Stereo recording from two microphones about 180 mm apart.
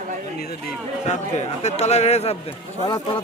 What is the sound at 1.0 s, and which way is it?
A man's voice, 40° left (ahead or behind).